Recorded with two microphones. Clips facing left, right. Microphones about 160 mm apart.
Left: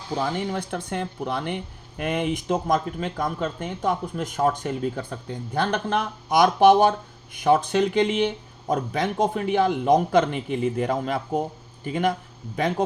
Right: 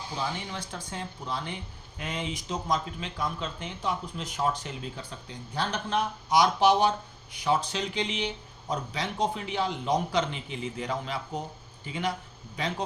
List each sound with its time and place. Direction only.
0.1 s speech: 50° left (ahead or behind)